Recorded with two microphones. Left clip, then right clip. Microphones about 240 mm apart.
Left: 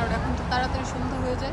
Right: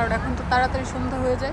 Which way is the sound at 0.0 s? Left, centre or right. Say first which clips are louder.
Right 3 dB; centre.